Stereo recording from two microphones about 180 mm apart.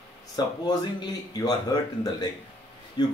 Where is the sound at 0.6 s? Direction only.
20° left (ahead or behind).